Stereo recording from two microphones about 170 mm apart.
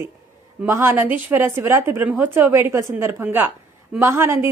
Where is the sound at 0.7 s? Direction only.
15° right (ahead or behind).